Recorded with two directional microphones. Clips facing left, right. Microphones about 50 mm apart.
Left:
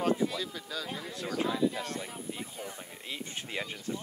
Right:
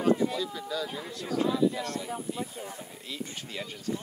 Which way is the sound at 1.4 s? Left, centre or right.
Centre.